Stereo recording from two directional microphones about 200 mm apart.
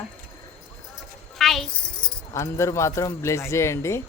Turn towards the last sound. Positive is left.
turn(degrees=15)  # may be behind; listen again after turning